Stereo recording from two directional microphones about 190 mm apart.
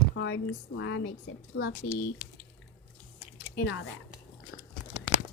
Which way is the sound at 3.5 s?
60° left (ahead or behind).